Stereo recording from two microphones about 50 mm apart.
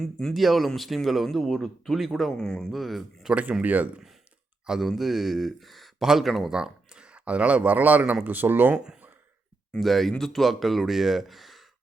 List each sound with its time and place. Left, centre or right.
0.0 s speech: centre
0.3 s speech: centre
2.4 s speech: centre
2.7 s speech: centre
3.6 s speech: right
4.9 s speech: centre; by 8.8 s right
9.8 s speech: centre